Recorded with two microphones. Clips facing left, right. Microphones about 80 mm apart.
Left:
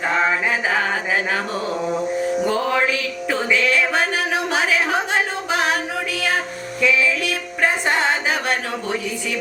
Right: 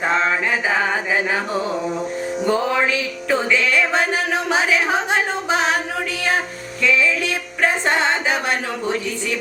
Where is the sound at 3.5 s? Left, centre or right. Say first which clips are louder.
Left 2 dB; centre.